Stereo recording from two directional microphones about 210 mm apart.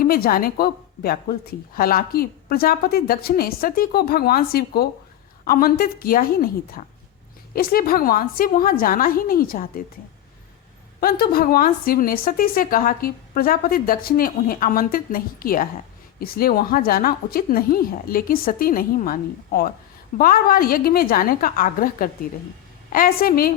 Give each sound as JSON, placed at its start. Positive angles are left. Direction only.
{"t": 0.0, "sound": "a woman's voice", "side_deg": 45}
{"t": 11.0, "sound": "a woman's voice", "side_deg": 45}